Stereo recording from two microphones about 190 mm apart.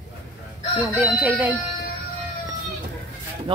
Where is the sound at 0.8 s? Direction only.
5° right (ahead or behind).